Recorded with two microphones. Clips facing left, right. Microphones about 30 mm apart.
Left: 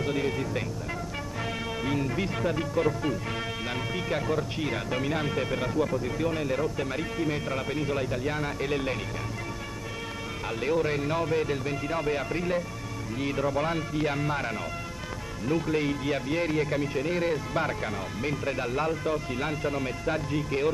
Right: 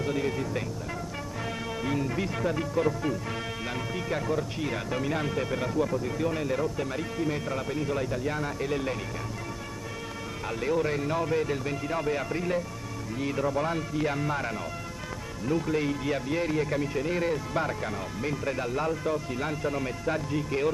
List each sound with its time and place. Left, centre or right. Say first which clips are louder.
0.0 s speech: left 1 dB; left
1.9 s speech: even; centre
10.4 s speech: left 1 dB; centre